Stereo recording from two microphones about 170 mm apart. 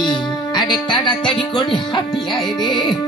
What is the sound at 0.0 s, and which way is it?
Music, 25° left (ahead or behind).